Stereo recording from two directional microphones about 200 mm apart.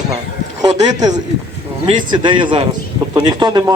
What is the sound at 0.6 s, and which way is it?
A man's voice, 20° right (ahead or behind).